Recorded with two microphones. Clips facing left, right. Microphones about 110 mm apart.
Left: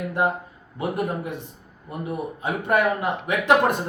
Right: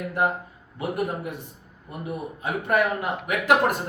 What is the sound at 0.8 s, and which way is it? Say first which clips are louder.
Speech: left 2 dB; 25° left (ahead or behind).